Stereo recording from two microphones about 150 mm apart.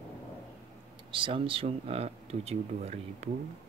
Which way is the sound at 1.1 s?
35° right (ahead or behind).